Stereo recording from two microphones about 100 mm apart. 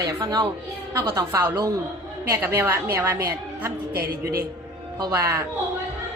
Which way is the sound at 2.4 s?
25° right (ahead or behind).